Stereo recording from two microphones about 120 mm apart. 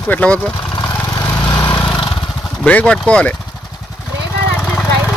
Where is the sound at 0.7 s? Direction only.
30° left (ahead or behind).